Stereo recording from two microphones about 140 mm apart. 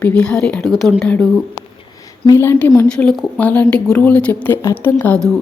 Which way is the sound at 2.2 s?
20° left (ahead or behind).